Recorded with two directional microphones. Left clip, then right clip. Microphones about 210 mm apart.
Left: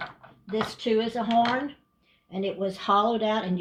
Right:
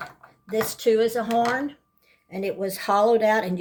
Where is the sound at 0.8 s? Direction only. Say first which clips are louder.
Right 7 dB; 40° right (ahead or behind).